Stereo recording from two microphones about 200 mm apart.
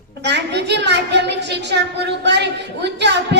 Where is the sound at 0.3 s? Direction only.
60° right (ahead or behind).